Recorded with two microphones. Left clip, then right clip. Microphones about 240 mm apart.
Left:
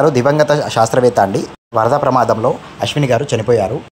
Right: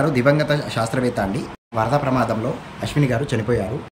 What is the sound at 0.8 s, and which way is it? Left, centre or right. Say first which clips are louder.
Speech: left 11 dB; left.